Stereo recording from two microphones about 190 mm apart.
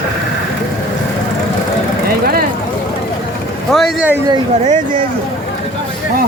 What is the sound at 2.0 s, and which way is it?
Speech, 50° right (ahead or behind).